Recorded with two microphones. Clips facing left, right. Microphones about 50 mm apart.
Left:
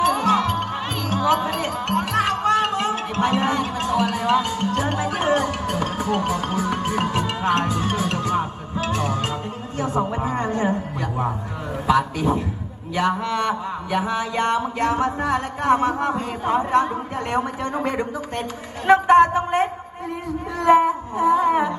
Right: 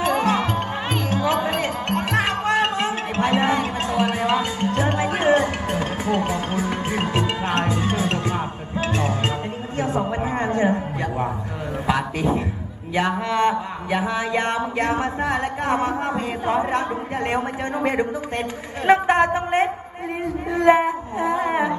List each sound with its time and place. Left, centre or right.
0.0 s music: right
8.9 s speech: right
20.6 s a sound: right